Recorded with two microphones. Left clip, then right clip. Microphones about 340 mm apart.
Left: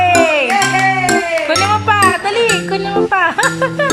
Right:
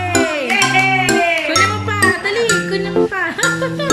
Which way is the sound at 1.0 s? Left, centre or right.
Centre.